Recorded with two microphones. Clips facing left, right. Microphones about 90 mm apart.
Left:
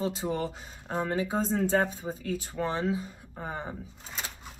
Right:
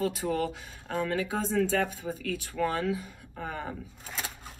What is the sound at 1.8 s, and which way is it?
Speech, 30° left (ahead or behind).